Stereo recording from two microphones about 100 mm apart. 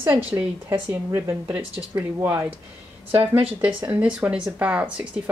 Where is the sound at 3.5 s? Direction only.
15° right (ahead or behind).